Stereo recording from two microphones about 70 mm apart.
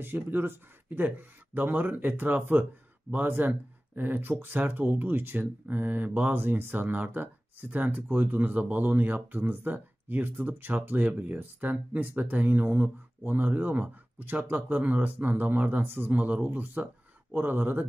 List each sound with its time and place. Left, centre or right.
0.0 s speech: right